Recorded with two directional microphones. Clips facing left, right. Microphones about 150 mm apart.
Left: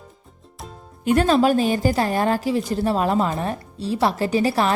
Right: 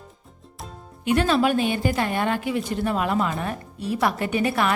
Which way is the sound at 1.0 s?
45° left (ahead or behind).